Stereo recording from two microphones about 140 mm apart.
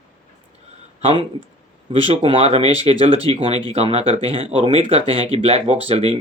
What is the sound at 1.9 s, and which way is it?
Speech, 40° right (ahead or behind).